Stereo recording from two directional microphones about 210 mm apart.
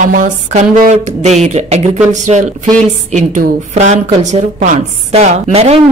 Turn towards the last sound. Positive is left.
turn(degrees=-30)  # may be behind; listen again after turning